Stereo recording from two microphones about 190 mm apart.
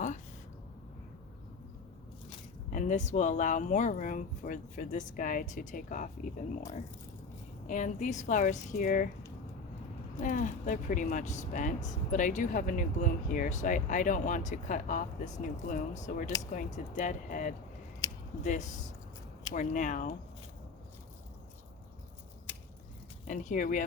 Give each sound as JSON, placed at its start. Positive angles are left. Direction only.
{"t": 2.6, "sound": "speech", "side_deg": 40}
{"t": 7.7, "sound": "speech", "side_deg": 40}
{"t": 10.2, "sound": "speech", "side_deg": 40}
{"t": 18.0, "sound": "scissors", "side_deg": 20}
{"t": 18.4, "sound": "speech", "side_deg": 40}
{"t": 23.2, "sound": "speech", "side_deg": 40}